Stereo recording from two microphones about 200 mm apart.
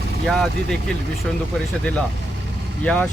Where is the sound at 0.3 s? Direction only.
Centre (ahead or behind).